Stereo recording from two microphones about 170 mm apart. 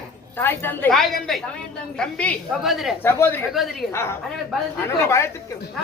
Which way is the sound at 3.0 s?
15° left (ahead or behind).